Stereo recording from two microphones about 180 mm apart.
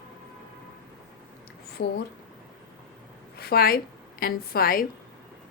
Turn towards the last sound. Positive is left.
turn(degrees=55)  # may be behind; listen again after turning